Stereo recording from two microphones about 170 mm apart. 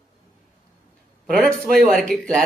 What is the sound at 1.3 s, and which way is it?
Speech, centre (ahead or behind).